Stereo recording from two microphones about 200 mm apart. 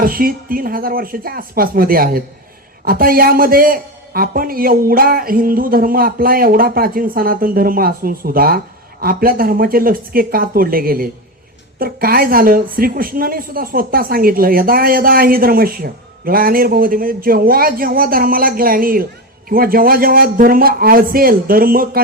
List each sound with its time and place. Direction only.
0.0 s a man's voice: 45° right (ahead or behind)